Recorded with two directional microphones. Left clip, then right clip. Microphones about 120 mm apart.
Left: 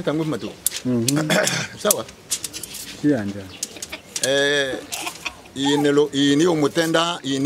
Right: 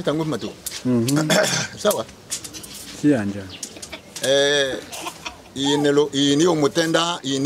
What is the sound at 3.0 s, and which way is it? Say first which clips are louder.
Speech: right 2 dB; 20° right (ahead or behind).